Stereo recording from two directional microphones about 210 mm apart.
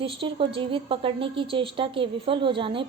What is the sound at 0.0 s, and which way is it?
A woman's voice, 25° right (ahead or behind).